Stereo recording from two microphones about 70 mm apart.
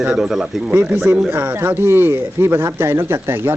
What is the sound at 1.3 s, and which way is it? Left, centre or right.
Speech, right.